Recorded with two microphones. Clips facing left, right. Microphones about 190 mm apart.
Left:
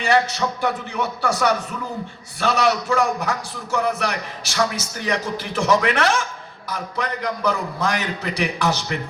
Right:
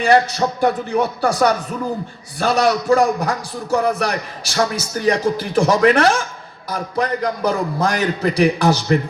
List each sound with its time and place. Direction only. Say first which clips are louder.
0.0 s a man's voice: right 4 dB; 40° right (ahead or behind)
2.4 s a man's voice: right 3 dB; 35° right (ahead or behind)